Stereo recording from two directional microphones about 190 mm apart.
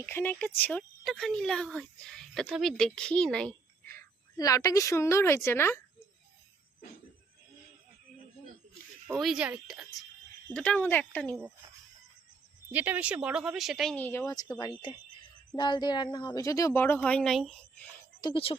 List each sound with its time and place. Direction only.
0.0 s speech: 10° left (ahead or behind)
9.1 s speech: centre (ahead or behind)
10.5 s speech: 5° left (ahead or behind)
12.7 s speech: 10° right (ahead or behind); by 14.5 s 15° left (ahead or behind)
15.5 s speech: 25° left (ahead or behind); by 17.8 s centre (ahead or behind)
18.2 s speech: 25° left (ahead or behind)